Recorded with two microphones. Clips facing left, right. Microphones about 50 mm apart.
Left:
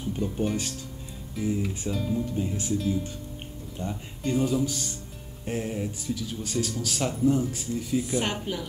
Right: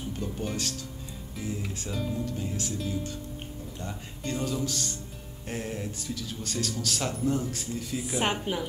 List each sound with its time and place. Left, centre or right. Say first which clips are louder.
0.2 s music: left 5 dB; centre
1.3 s speech: left 7 dB; centre
2.2 s speech: left 4 dB; centre
8.1 s a woman's voice: even; centre